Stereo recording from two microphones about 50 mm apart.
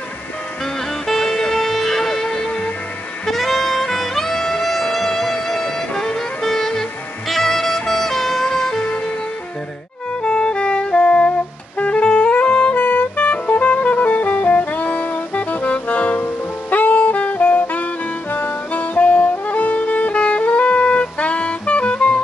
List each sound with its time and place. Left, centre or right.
1.0 s music: centre
3.3 s saxophone: centre
10.2 s music: centre
16.7 s saxophone: left
18.3 s music: left